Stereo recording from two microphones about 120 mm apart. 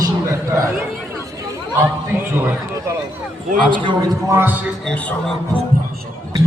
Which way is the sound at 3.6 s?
40° right (ahead or behind).